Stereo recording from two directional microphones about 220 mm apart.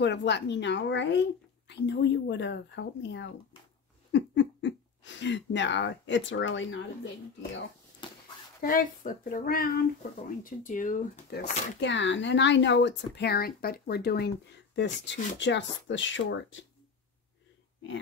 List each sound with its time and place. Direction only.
0.0 s speech: 50° left (ahead or behind)
8.0 s a sound: 20° left (ahead or behind)
8.6 s speech: 40° left (ahead or behind)
11.8 s speech: 55° left (ahead or behind)